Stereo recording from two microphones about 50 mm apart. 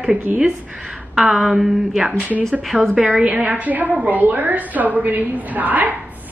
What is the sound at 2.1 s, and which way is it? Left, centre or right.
A woman's voice, right.